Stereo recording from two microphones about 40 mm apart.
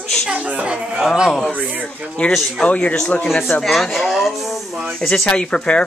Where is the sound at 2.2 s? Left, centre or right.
Left.